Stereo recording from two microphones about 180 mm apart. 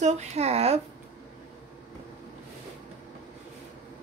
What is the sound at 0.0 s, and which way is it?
Speech, 40° right (ahead or behind).